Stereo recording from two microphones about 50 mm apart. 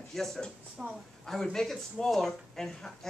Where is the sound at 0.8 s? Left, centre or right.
Right.